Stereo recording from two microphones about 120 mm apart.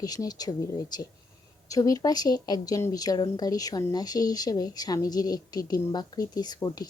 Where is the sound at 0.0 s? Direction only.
30° left (ahead or behind).